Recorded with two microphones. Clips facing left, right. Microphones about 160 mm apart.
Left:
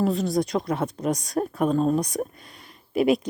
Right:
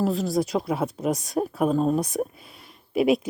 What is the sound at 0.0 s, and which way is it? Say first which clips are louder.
Speech: left 1 dB; centre (ahead or behind).